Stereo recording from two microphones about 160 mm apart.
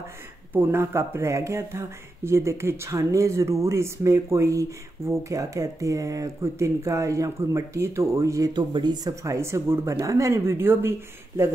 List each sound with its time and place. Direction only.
0.5 s speech: 15° right (ahead or behind)